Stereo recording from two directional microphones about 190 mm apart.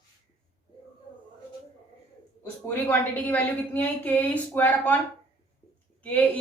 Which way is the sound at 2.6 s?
10° left (ahead or behind).